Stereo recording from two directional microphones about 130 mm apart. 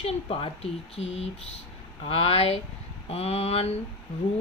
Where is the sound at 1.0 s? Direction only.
55° left (ahead or behind).